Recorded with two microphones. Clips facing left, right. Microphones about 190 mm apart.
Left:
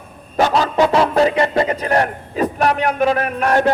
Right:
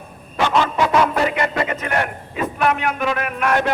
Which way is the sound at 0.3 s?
40° left (ahead or behind).